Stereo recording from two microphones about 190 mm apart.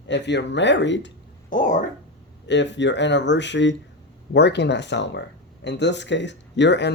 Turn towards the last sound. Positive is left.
turn(degrees=65)  # may be behind; listen again after turning